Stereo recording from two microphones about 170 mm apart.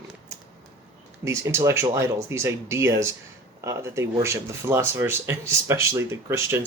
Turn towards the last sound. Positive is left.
turn(degrees=-15)  # may be behind; listen again after turning